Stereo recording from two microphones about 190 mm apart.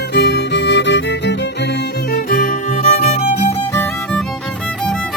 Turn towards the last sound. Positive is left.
turn(degrees=10)  # may be behind; listen again after turning